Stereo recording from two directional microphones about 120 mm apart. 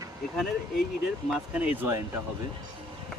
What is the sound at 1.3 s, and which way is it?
Speech, 10° right (ahead or behind).